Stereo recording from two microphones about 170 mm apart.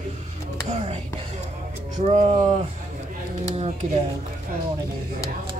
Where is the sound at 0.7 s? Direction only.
40° right (ahead or behind).